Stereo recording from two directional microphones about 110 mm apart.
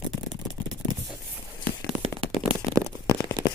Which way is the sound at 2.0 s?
55° right (ahead or behind).